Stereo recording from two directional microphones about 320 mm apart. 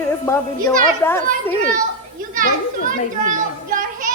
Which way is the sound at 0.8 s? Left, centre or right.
Centre.